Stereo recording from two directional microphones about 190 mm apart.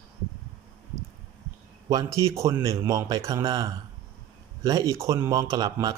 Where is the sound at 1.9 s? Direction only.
15° right (ahead or behind).